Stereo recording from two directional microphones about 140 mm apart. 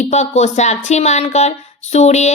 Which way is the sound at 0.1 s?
55° left (ahead or behind).